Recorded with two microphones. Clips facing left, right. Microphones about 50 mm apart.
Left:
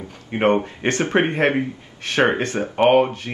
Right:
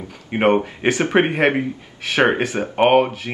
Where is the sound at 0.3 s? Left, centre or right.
Centre.